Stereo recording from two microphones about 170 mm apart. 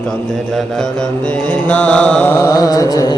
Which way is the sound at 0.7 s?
5° left (ahead or behind).